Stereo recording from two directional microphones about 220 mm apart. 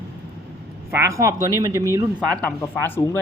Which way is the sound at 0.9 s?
15° right (ahead or behind).